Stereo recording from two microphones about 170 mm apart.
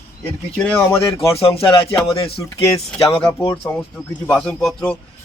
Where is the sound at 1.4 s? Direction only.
35° left (ahead or behind).